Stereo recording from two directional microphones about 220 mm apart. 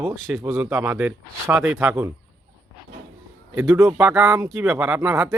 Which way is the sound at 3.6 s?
10° right (ahead or behind).